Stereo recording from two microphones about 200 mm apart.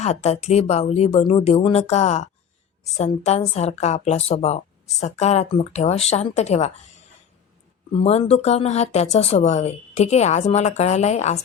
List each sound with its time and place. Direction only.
0.0 s a woman's voice: 35° left (ahead or behind)
7.9 s a woman's voice: 30° left (ahead or behind)